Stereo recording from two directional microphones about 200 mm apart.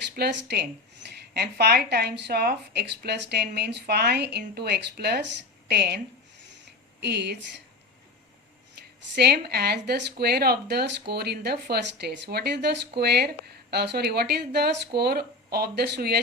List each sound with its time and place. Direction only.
0.2 s speech: 55° right (ahead or behind)
7.0 s speech: 55° right (ahead or behind)
9.1 s speech: 55° right (ahead or behind)